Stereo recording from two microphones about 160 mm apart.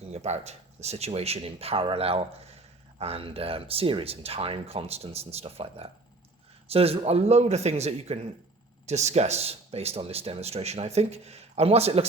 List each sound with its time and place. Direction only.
0.1 s speech: 45° right (ahead or behind)